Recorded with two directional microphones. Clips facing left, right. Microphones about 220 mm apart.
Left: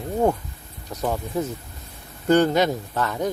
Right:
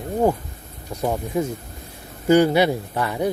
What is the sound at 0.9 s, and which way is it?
Speech, 10° right (ahead or behind).